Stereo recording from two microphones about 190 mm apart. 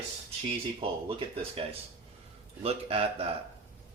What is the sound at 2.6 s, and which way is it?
Speech, 30° right (ahead or behind).